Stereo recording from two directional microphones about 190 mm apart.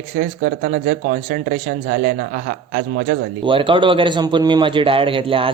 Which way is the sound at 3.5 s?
25° right (ahead or behind).